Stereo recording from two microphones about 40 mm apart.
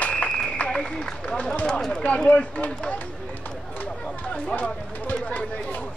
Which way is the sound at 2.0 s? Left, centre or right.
Left.